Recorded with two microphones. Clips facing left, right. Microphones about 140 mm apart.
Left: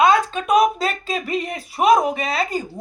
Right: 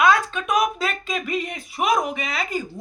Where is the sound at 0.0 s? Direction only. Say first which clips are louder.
Left 3 dB; 30° left (ahead or behind).